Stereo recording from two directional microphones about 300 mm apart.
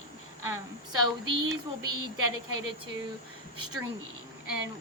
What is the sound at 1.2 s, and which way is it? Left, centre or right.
Speech, right.